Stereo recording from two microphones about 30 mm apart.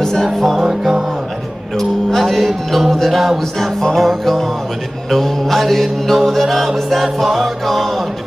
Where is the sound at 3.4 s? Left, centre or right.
Centre.